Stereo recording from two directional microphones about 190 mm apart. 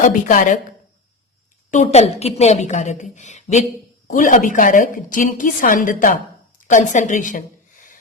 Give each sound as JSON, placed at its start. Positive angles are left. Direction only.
{"t": 0.3, "sound": "a woman's voice", "side_deg": 40}
{"t": 1.7, "sound": "a woman's voice", "side_deg": 35}